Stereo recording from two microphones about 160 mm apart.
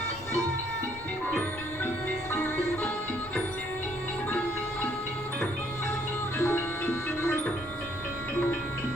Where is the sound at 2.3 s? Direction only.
10° left (ahead or behind).